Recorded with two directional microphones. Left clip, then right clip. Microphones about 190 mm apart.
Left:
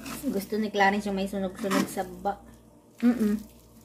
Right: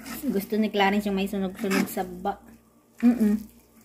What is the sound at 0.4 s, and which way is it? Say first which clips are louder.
Speech: right 1 dB; 30° right (ahead or behind).